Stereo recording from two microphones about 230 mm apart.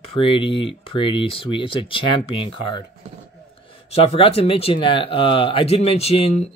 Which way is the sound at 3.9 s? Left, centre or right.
Left.